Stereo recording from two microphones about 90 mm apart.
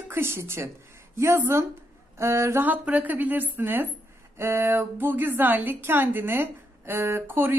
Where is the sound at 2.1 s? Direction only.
30° right (ahead or behind).